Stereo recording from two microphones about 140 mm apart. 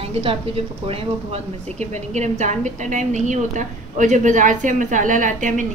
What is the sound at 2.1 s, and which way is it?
A woman's voice, 55° right (ahead or behind).